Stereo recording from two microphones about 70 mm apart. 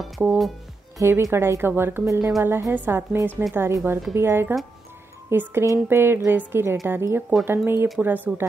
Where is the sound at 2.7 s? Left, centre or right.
Right.